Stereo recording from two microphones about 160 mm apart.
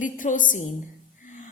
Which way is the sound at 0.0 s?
55° left (ahead or behind).